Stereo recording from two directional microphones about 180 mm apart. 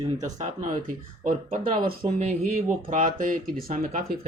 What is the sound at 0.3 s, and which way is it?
Speech, 45° right (ahead or behind).